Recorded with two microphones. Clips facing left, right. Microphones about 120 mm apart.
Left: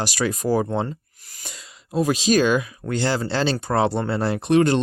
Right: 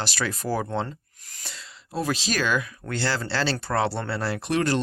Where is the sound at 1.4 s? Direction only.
15° left (ahead or behind).